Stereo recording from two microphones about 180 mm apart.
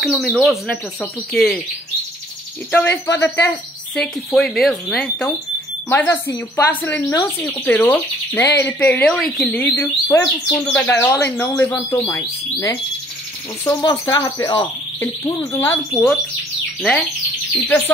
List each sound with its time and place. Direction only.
0.0 s speech: centre (ahead or behind)
2.7 s speech: 10° left (ahead or behind)
17.6 s speech: 10° left (ahead or behind)